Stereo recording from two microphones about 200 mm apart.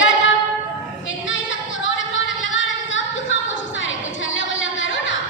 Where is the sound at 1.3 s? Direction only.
70° left (ahead or behind).